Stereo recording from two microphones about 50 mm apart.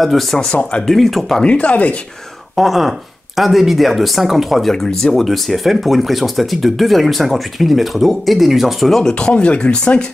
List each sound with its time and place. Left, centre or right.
0.0 s speech: centre
0.6 s speech: centre
0.8 s speech: centre
1.4 s speech: left
2.5 s speech: centre
9.2 s speech: left